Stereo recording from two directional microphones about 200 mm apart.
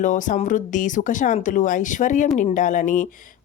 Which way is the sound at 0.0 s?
40° left (ahead or behind).